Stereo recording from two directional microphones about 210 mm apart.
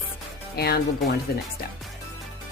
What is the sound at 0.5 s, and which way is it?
Speech, 50° left (ahead or behind).